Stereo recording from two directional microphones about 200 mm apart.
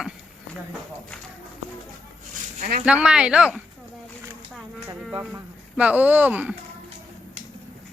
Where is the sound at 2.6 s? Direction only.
40° right (ahead or behind).